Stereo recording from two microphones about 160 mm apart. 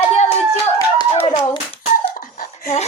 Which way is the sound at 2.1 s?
60° left (ahead or behind).